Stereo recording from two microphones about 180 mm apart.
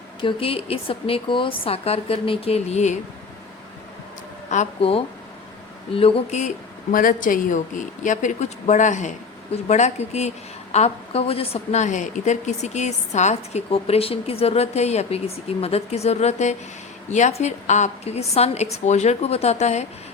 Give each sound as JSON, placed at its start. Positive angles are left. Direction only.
{"t": 0.2, "sound": "a woman's voice", "side_deg": 30}
{"t": 4.4, "sound": "a woman's voice", "side_deg": 40}
{"t": 6.9, "sound": "a woman's voice", "side_deg": 50}